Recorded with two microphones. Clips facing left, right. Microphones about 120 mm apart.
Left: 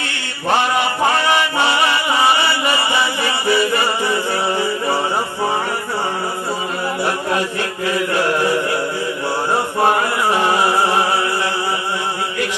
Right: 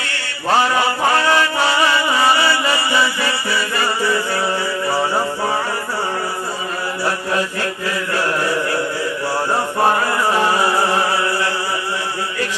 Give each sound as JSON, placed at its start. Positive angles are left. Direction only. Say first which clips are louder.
{"t": 1.3, "sound": "chant", "louder": "even", "side_deg": 20}
{"t": 7.9, "sound": "mantra", "louder": "left 4 dB", "side_deg": 20}
{"t": 10.4, "sound": "a sound", "louder": "left 1 dB", "side_deg": 20}